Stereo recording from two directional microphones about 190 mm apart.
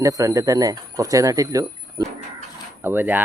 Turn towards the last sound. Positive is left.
turn(degrees=-10)  # may be behind; listen again after turning